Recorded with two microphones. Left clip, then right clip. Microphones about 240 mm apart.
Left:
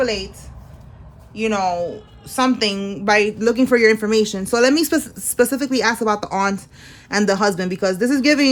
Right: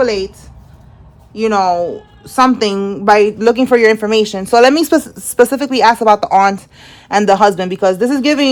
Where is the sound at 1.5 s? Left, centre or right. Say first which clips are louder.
Right 8 dB; right.